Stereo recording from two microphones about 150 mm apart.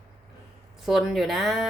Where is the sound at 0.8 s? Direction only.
Centre (ahead or behind).